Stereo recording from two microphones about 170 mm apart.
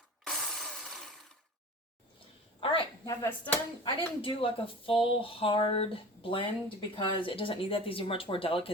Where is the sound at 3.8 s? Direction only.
30° left (ahead or behind).